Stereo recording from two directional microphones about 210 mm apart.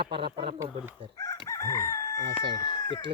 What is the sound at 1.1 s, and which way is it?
Crowing, 15° left (ahead or behind).